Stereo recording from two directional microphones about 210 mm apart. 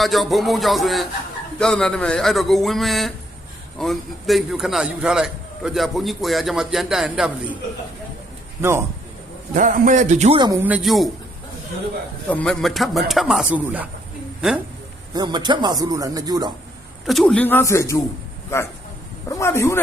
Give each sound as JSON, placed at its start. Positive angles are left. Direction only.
{"t": 0.0, "sound": "a man's voice", "side_deg": 0}
{"t": 9.6, "sound": "a man's voice", "side_deg": -40}
{"t": 10.4, "sound": "a man's voice", "side_deg": -15}
{"t": 12.3, "sound": "a man's voice", "side_deg": 5}
{"t": 15.1, "sound": "a man's voice", "side_deg": -20}
{"t": 17.1, "sound": "a man's voice", "side_deg": 0}
{"t": 19.3, "sound": "a man's voice", "side_deg": 10}